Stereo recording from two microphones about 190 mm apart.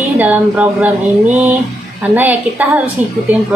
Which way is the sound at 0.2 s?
10° right (ahead or behind).